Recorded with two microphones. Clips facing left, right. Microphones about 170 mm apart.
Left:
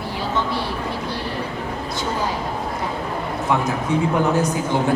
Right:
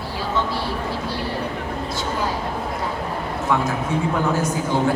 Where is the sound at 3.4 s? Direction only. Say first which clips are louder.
Even; 20° left (ahead or behind).